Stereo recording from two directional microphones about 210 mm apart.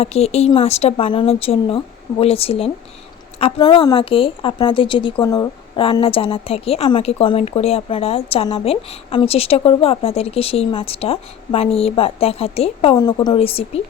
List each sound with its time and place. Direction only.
0.0 s a woman's voice: 30° left (ahead or behind)